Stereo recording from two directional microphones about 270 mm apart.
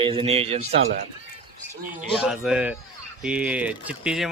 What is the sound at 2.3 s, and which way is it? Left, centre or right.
Speech, centre.